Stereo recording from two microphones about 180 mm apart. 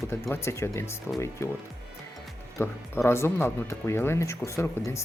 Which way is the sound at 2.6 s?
15° left (ahead or behind).